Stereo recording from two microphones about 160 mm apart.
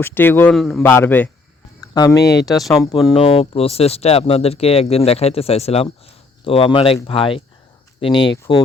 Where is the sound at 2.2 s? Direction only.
90° left.